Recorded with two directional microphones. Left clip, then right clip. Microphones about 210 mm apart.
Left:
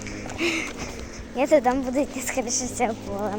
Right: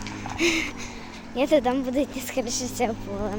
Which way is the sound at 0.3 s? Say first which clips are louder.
Right 2 dB; 15° right (ahead or behind).